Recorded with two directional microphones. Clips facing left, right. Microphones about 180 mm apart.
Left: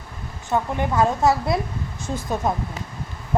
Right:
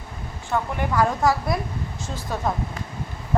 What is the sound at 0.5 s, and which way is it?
A woman's voice, 25° left (ahead or behind).